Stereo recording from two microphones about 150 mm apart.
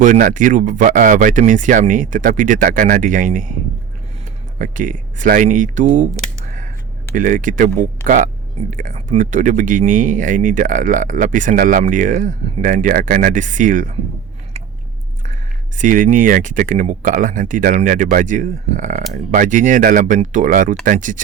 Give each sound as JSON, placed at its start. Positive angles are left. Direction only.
{"t": 0.0, "sound": "speech", "side_deg": -60}
{"t": 4.5, "sound": "speech", "side_deg": -60}
{"t": 15.8, "sound": "speech", "side_deg": -60}